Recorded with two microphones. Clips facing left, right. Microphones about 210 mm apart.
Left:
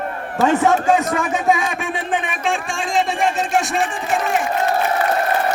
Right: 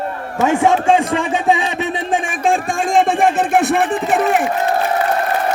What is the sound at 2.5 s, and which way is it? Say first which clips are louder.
Speech: right 6 dB; 55° right (ahead or behind).